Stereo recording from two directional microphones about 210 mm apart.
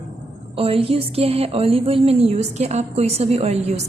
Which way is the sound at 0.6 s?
25° right (ahead or behind).